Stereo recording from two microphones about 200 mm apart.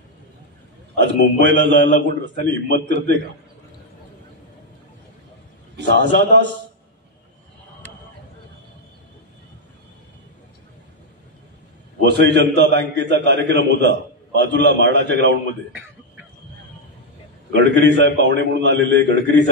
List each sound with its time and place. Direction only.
0.9 s a man's voice: 60° right (ahead or behind)
5.8 s a man's voice: 60° right (ahead or behind)
12.0 s a man's voice: 60° right (ahead or behind)
17.5 s a man's voice: 60° right (ahead or behind)